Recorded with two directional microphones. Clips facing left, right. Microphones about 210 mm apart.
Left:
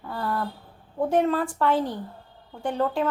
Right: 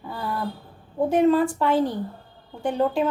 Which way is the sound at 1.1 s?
15° right (ahead or behind).